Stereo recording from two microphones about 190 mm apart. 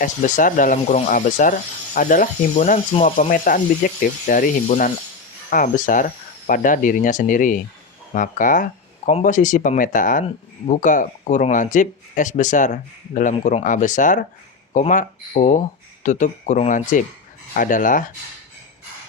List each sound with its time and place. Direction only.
0.0 s speech: 45° left (ahead or behind)